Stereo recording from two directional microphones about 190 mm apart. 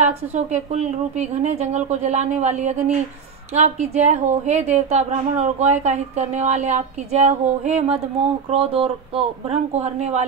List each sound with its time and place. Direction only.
0.0 s a woman's voice: 35° right (ahead or behind)